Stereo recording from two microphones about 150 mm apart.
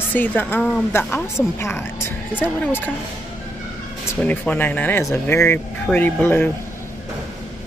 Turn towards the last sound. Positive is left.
turn(degrees=10)  # may be behind; listen again after turning